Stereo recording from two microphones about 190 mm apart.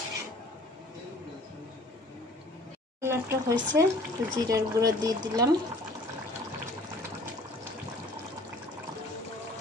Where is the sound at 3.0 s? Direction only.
15° right (ahead or behind).